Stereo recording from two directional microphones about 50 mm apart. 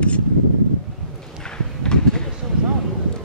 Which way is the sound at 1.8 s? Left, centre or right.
Centre.